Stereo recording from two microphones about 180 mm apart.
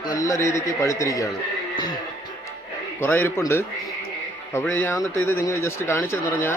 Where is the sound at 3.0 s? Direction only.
10° left (ahead or behind).